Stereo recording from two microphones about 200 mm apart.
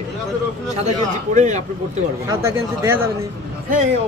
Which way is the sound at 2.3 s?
10° right (ahead or behind).